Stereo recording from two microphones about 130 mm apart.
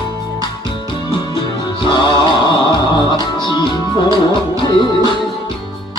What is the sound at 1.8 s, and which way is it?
Music, 35° left (ahead or behind).